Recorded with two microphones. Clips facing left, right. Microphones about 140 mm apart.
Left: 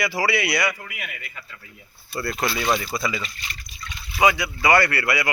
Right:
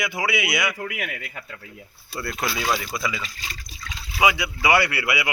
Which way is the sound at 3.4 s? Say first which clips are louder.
Even; 90° right.